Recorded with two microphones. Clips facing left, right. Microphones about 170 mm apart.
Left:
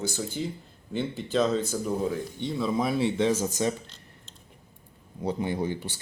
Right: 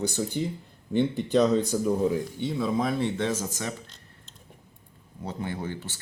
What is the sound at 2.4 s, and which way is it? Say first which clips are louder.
Speech: left 1 dB; centre (ahead or behind).